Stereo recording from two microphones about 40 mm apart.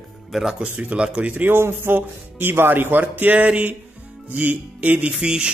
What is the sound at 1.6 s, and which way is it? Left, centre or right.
Speech, right.